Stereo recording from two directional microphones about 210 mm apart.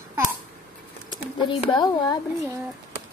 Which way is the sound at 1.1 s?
25° left (ahead or behind).